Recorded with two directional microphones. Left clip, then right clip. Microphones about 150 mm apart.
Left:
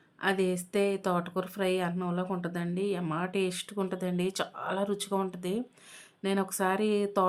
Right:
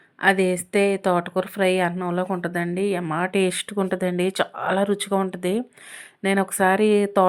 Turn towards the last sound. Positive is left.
turn(degrees=-30)  # may be behind; listen again after turning